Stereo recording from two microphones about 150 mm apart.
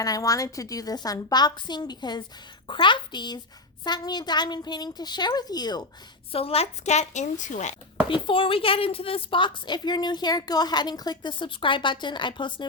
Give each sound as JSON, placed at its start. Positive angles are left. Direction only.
{"t": 0.0, "sound": "a woman's voice", "side_deg": 25}
{"t": 6.3, "sound": "a woman's voice", "side_deg": 40}
{"t": 8.1, "sound": "a woman's voice", "side_deg": 35}